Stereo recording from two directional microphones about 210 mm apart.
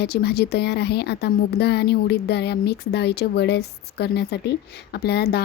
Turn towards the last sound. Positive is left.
turn(degrees=50)  # may be behind; listen again after turning